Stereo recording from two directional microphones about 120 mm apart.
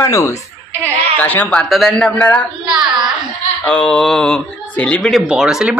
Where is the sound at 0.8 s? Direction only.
15° left (ahead or behind).